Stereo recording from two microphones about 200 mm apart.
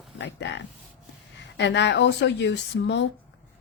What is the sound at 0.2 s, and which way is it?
Speech, 65° left (ahead or behind).